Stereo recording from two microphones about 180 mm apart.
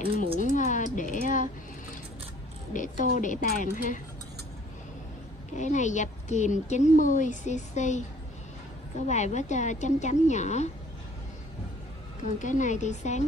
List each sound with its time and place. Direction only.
0.4 s a sound: 45° left (ahead or behind)
2.7 s a woman's voice: 45° left (ahead or behind)
5.6 s a woman's voice: 40° left (ahead or behind)
9.0 s a woman's voice: 40° left (ahead or behind)
12.4 s a woman's voice: 45° left (ahead or behind)